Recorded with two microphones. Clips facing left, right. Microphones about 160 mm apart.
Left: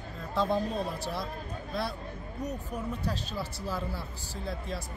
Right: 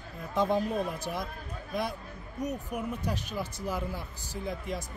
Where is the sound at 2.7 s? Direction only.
15° right (ahead or behind).